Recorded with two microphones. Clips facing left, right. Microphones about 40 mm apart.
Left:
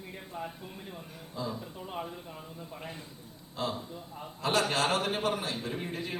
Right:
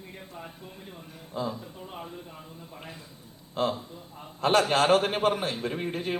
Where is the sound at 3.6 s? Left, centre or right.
Right.